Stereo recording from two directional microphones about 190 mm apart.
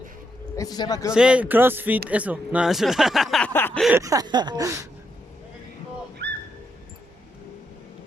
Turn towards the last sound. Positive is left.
turn(degrees=-60)  # may be behind; listen again after turning